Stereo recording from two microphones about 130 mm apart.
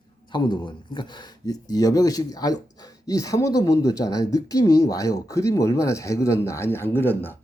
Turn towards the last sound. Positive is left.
turn(degrees=15)  # may be behind; listen again after turning